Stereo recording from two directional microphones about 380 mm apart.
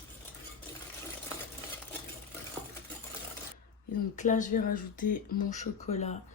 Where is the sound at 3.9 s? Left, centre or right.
Centre.